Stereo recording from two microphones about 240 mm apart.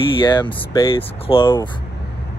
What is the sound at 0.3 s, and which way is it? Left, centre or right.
Speech, centre.